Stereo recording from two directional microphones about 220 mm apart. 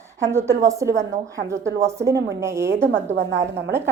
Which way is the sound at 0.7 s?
15° right (ahead or behind).